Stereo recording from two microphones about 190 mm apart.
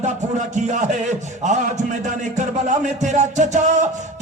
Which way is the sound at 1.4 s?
40° right (ahead or behind).